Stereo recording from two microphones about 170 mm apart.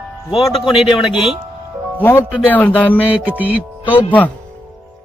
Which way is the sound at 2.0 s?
10° left (ahead or behind).